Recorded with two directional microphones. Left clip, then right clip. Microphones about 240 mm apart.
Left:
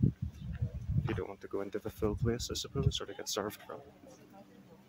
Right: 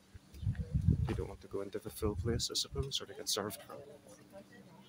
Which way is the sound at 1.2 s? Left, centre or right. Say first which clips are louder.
Left 3 dB; centre.